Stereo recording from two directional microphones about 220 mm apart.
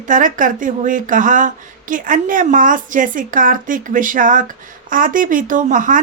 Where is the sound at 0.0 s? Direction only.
35° right (ahead or behind).